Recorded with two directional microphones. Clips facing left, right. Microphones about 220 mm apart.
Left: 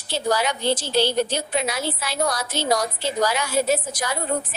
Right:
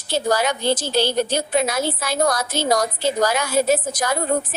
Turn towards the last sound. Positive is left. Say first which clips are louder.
# right 3 dB
turn(degrees=-45)  # may be behind; listen again after turning